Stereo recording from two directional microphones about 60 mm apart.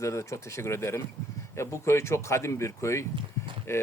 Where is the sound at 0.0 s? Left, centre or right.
Left.